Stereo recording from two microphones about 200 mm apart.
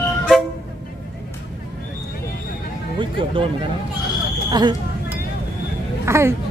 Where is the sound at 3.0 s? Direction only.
25° right (ahead or behind).